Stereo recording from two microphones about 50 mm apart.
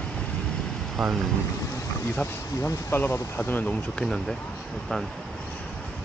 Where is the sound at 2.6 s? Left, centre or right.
Left.